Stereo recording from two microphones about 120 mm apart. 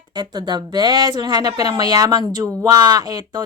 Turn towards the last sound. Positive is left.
turn(degrees=-35)  # may be behind; listen again after turning